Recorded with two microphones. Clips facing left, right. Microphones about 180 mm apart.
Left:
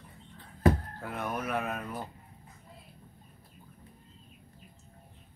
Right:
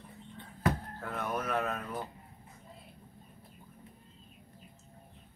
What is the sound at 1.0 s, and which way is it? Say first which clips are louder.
Music: even; 10° left (ahead or behind).